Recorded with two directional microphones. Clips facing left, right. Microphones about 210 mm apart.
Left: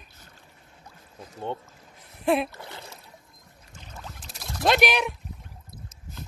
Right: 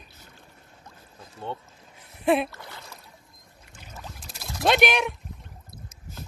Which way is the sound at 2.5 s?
25° left (ahead or behind).